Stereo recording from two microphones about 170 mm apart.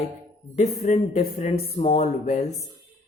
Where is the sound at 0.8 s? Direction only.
40° left (ahead or behind).